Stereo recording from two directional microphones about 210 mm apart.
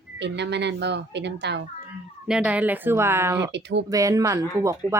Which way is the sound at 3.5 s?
55° right (ahead or behind).